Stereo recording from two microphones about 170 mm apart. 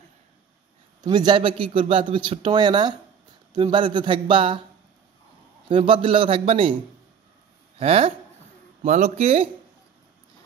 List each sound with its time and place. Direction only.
1.0 s speech: 25° right (ahead or behind)
5.7 s a man's voice: 30° right (ahead or behind)
7.8 s a man's voice: 35° right (ahead or behind)